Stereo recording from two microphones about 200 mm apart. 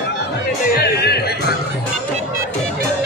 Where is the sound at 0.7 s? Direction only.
55° left (ahead or behind).